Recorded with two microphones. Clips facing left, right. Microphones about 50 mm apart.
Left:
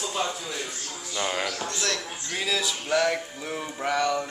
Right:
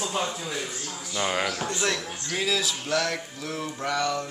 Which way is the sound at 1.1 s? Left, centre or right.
Centre.